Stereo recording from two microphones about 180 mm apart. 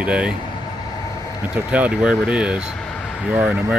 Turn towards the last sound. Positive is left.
turn(degrees=-5)  # may be behind; listen again after turning